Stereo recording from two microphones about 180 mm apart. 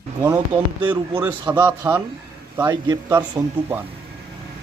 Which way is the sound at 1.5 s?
20° right (ahead or behind).